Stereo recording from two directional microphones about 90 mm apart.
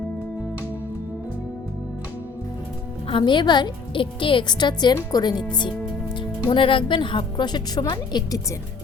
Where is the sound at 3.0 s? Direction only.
70° left (ahead or behind); by 5.4 s 50° left (ahead or behind).